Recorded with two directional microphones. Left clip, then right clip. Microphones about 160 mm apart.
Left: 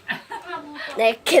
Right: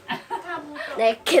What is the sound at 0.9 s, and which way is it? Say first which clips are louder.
Speech: left 1 dB; 15° left (ahead or behind).